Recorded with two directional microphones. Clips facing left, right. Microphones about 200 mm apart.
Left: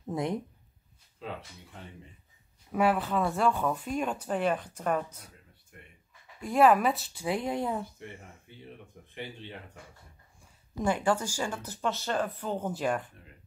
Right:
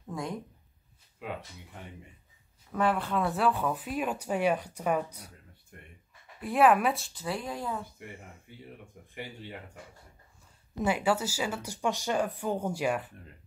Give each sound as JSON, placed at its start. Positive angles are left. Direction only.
{"t": 0.0, "sound": "speech", "side_deg": 20}
{"t": 2.7, "sound": "speech", "side_deg": 5}
{"t": 6.4, "sound": "speech", "side_deg": 0}
{"t": 7.2, "sound": "speech", "side_deg": 20}
{"t": 8.0, "sound": "speech", "side_deg": -10}
{"t": 10.8, "sound": "speech", "side_deg": -10}